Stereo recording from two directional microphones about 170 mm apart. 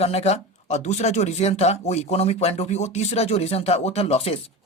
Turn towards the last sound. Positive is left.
turn(degrees=35)  # may be behind; listen again after turning